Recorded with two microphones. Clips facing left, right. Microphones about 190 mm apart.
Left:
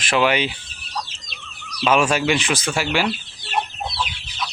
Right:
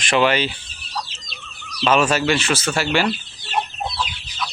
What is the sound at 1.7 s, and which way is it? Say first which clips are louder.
Speech: right 1 dB; 10° left (ahead or behind).